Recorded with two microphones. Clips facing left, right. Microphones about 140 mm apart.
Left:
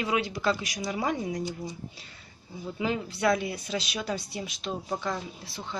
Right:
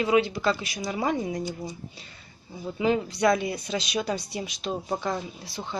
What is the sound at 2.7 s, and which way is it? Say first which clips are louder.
Speech: right 6 dB; centre (ahead or behind).